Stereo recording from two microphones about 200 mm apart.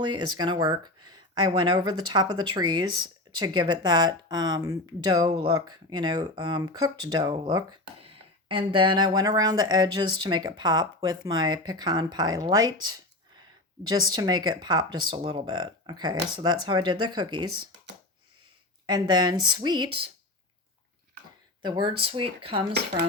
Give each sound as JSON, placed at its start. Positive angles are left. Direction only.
{"t": 0.3, "sound": "speech", "side_deg": -20}
{"t": 13.8, "sound": "speech", "side_deg": -20}
{"t": 18.9, "sound": "speech", "side_deg": -20}
{"t": 21.6, "sound": "speech", "side_deg": -20}